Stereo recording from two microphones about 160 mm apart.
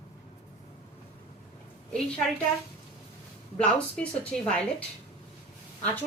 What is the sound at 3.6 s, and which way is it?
Speech, 5° left (ahead or behind).